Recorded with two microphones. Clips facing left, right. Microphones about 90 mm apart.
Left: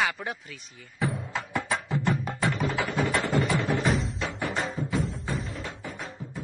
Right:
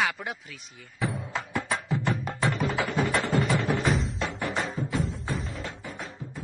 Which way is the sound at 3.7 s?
Centre (ahead or behind).